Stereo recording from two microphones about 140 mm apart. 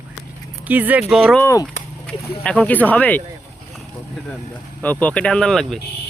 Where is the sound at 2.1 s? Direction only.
10° left (ahead or behind).